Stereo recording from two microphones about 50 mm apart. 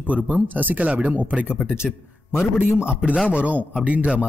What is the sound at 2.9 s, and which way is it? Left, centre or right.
Speech, right.